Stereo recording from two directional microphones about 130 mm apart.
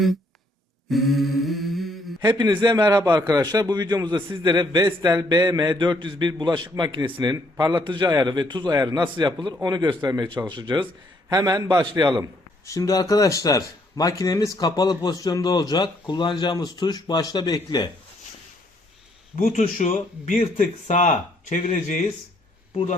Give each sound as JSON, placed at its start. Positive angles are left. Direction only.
{"t": 0.9, "sound": "mantra", "side_deg": 0}
{"t": 2.3, "sound": "a man's voice", "side_deg": -35}
{"t": 12.6, "sound": "speech", "side_deg": 25}
{"t": 19.4, "sound": "speech", "side_deg": 80}
{"t": 22.7, "sound": "a man's voice", "side_deg": 50}